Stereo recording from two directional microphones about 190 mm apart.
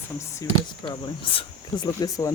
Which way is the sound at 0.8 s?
25° left (ahead or behind).